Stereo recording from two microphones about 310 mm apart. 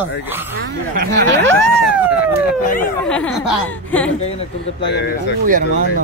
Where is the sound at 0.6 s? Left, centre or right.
Right.